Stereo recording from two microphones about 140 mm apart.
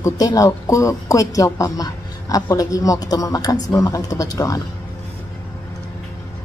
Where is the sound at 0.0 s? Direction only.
25° left (ahead or behind).